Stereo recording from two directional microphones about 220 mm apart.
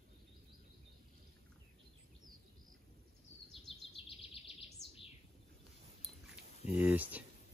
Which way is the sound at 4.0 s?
25° left (ahead or behind).